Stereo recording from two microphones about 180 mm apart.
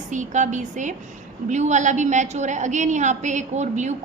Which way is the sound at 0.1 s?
45° right (ahead or behind).